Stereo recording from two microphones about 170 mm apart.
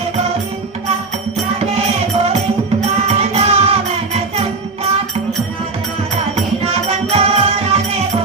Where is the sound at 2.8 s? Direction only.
40° right (ahead or behind).